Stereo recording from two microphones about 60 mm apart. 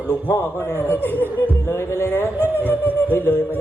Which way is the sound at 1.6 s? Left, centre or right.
Left.